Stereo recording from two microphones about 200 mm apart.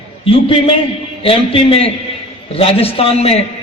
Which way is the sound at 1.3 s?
30° left (ahead or behind).